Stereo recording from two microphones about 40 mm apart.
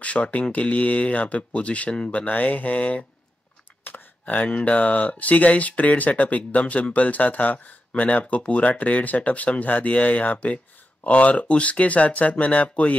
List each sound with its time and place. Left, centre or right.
0.0 s speech: left
2.2 s speech: left
3.8 s computer keyboard: left
4.5 s speech: left